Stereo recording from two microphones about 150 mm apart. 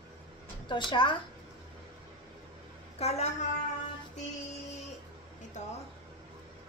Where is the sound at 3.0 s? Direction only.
45° left (ahead or behind).